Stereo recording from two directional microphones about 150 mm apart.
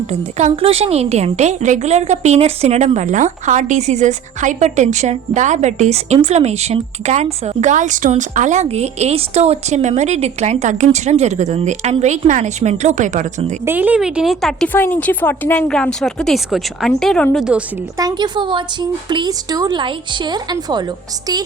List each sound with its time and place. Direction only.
0.1 s speech: 50° right (ahead or behind)
13.7 s speech: 10° right (ahead or behind)
14.7 s speech: 10° left (ahead or behind); by 17.6 s 5° right (ahead or behind)
17.9 s speech: 25° right (ahead or behind)